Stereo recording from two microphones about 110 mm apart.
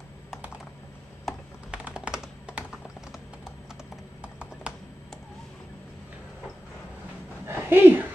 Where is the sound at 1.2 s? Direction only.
10° right (ahead or behind).